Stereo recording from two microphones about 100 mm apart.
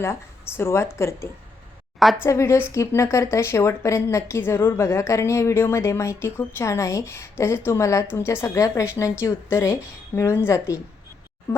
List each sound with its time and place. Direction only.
0.0 s a woman's voice: 25° left (ahead or behind)